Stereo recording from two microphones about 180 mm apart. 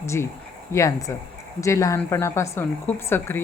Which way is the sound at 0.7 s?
20° left (ahead or behind).